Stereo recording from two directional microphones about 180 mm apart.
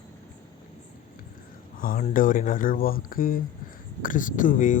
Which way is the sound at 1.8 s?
45° left (ahead or behind).